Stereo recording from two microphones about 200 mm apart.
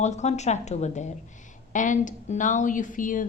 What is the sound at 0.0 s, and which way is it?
A woman's voice, 35° left (ahead or behind).